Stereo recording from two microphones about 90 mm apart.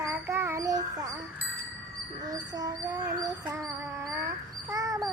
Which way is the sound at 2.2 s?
45° right (ahead or behind).